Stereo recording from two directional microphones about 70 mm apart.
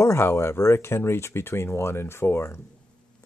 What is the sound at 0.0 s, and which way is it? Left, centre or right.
Speech, left.